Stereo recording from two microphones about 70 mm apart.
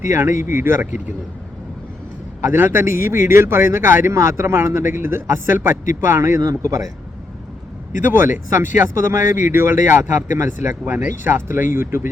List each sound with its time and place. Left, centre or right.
0.1 s a man's voice: right
2.4 s a man's voice: right
6.4 s a man's voice: right
8.0 s a man's voice: right
10.8 s speech: right
11.2 s a man's voice: right